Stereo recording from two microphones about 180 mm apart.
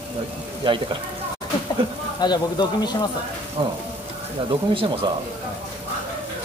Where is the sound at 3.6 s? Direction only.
25° right (ahead or behind).